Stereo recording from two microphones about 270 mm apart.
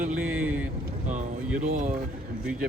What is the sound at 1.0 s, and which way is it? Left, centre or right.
Speech, right.